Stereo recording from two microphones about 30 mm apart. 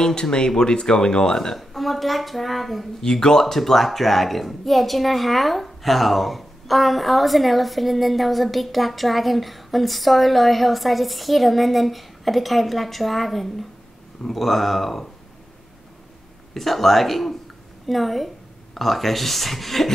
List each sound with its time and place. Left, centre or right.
0.0 s speech: left
1.6 s a woman's voice: centre
3.0 s a woman's voice: left; by 15.0 s centre
16.5 s a woman's voice: centre